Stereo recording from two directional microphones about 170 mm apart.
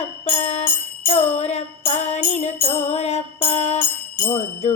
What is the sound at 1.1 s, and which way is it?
Music, 40° left (ahead or behind).